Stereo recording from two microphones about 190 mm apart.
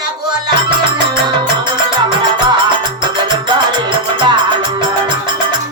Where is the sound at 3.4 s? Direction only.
25° right (ahead or behind).